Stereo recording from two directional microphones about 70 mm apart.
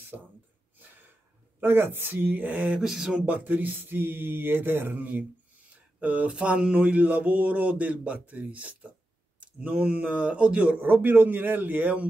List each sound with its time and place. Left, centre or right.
0.1 s speech: centre
1.6 s mantra: right
2.8 s speech: centre
3.3 s mantra: right